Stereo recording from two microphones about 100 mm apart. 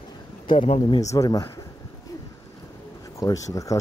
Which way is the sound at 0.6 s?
90° left.